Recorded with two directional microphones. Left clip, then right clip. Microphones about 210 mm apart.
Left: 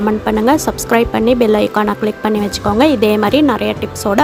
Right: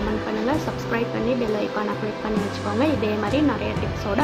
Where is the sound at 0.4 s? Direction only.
55° left (ahead or behind).